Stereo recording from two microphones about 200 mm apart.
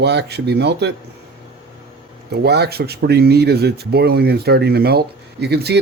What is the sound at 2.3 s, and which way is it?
Speech, 55° right (ahead or behind).